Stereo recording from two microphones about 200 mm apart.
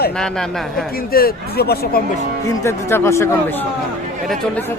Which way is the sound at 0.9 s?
50° left (ahead or behind).